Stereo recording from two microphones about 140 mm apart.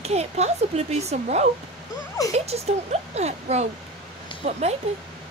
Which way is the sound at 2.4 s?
50° right (ahead or behind).